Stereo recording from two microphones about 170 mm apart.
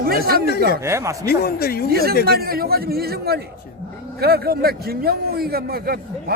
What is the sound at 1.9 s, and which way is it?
A man's voice, 60° right (ahead or behind).